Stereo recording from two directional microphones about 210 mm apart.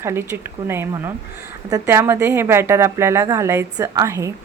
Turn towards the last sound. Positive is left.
turn(degrees=-15)  # may be behind; listen again after turning